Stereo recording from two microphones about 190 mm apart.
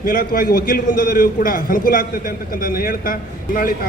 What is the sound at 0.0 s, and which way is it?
A man's voice, 50° left (ahead or behind).